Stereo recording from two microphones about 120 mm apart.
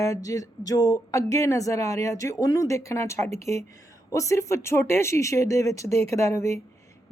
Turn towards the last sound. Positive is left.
turn(degrees=25)  # may be behind; listen again after turning